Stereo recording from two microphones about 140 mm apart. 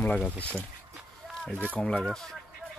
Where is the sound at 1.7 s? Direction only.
10° left (ahead or behind).